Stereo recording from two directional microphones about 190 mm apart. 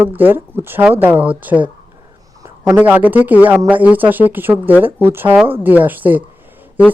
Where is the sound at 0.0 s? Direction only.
10° right (ahead or behind).